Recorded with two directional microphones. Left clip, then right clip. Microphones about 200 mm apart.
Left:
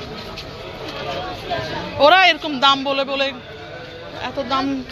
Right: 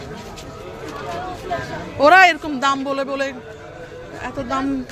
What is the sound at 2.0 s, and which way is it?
Speech, 30° right (ahead or behind).